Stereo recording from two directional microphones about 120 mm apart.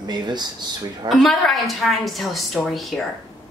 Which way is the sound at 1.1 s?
Centre (ahead or behind).